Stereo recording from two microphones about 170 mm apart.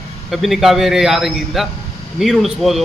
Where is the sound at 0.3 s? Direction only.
Centre (ahead or behind).